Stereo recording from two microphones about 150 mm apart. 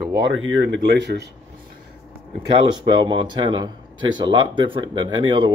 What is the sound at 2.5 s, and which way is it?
Speech, 30° right (ahead or behind).